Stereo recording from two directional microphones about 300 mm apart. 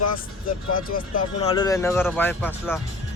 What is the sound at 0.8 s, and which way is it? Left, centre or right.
Speech, left.